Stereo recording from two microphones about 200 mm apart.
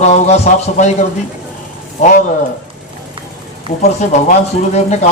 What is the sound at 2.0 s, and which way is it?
Speech, 40° left (ahead or behind).